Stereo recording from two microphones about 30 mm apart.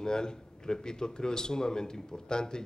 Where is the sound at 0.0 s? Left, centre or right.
Left.